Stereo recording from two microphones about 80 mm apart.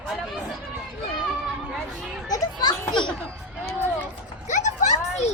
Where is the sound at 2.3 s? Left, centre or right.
Left.